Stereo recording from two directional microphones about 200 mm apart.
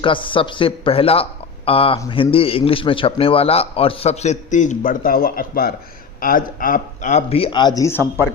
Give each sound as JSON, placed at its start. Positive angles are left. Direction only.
{"t": 0.0, "sound": "speech", "side_deg": 25}